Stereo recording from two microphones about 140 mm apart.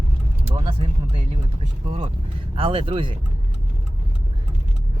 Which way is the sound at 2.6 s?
40° right (ahead or behind).